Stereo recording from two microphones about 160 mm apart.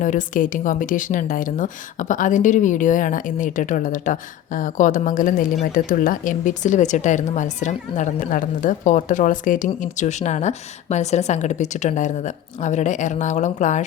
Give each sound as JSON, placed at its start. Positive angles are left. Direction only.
{"t": 0.0, "sound": "speech", "side_deg": 55}